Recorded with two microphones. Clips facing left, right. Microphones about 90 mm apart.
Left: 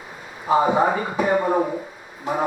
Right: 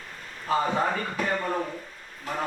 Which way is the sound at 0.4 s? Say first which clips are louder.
Left 7 dB; 15° left (ahead or behind).